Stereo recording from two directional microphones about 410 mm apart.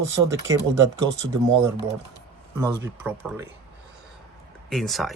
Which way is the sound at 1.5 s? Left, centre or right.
Right.